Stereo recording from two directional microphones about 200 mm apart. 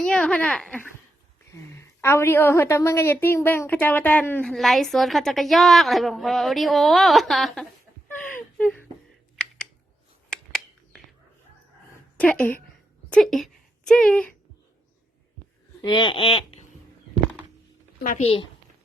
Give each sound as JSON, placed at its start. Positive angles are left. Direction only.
{"t": 0.0, "sound": "a woman's voice", "side_deg": 5}
{"t": 8.3, "sound": "whimper", "side_deg": 5}
{"t": 9.3, "sound": "a sound", "side_deg": 5}
{"t": 12.1, "sound": "a woman's voice", "side_deg": 5}
{"t": 13.1, "sound": "a sound", "side_deg": 5}
{"t": 15.8, "sound": "speech", "side_deg": 20}
{"t": 18.0, "sound": "a woman's voice", "side_deg": 40}